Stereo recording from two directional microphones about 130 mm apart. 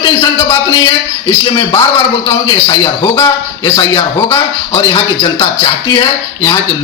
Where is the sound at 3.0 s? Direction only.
20° left (ahead or behind).